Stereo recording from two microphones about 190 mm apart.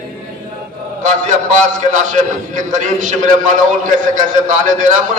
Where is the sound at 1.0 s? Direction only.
40° right (ahead or behind).